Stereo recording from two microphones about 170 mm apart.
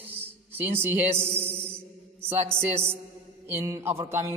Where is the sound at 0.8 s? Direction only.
10° right (ahead or behind).